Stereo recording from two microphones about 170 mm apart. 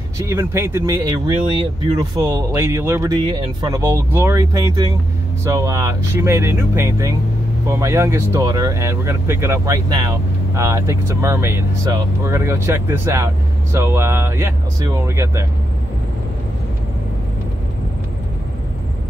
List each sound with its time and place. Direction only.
0.3 s speech: 15° right (ahead or behind)